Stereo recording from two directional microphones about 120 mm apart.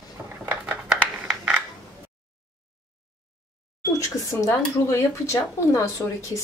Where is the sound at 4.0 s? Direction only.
25° left (ahead or behind).